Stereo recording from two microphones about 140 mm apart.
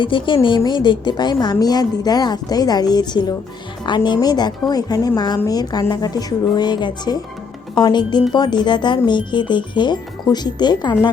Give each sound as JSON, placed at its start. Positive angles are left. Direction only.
{"t": 0.0, "sound": "a woman's voice", "side_deg": 35}